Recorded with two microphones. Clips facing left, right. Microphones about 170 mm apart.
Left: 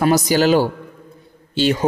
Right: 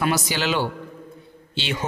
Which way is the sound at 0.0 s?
40° left (ahead or behind).